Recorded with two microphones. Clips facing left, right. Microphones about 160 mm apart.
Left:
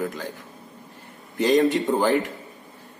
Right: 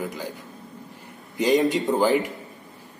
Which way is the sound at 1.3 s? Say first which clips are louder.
Left 1 dB; 15° right (ahead or behind).